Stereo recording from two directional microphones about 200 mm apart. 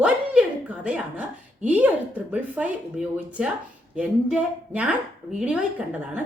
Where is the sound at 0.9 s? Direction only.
5° right (ahead or behind).